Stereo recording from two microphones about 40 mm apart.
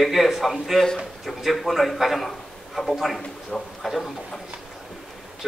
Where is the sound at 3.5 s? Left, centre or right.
Centre.